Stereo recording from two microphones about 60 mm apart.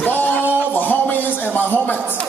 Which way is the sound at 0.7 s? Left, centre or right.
Left.